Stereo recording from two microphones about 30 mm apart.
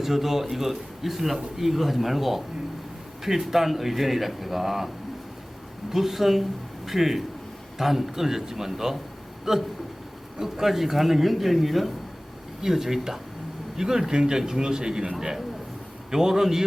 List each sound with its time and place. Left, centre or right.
0.0 s speech: centre
5.9 s speech: centre
16.1 s speech: centre